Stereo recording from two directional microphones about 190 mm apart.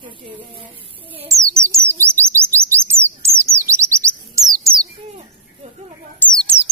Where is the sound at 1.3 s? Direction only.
15° right (ahead or behind).